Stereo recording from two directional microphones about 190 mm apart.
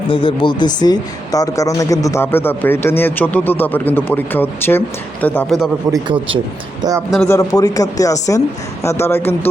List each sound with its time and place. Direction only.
0.1 s speech: 25° left (ahead or behind); by 5.5 s 10° left (ahead or behind)
5.9 s a man's voice: 25° right (ahead or behind)
7.3 s speech: 20° left (ahead or behind)